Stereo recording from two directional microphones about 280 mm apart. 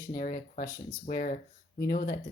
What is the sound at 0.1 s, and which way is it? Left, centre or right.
Speech, left.